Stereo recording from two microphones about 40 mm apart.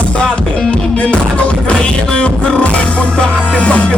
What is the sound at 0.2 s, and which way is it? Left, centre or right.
Music, left.